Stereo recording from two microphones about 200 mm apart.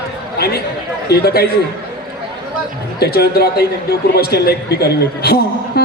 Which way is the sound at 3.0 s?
50° left (ahead or behind).